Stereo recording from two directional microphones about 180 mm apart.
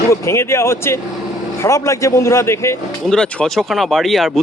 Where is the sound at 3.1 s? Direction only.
5° left (ahead or behind).